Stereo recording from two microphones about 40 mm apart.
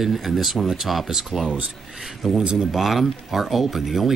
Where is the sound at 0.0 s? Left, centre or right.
Centre.